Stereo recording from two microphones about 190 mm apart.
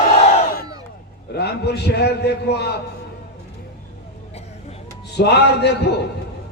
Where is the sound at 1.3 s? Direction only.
60° left (ahead or behind).